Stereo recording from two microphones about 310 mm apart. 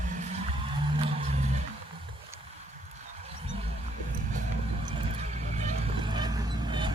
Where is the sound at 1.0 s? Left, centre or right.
Centre.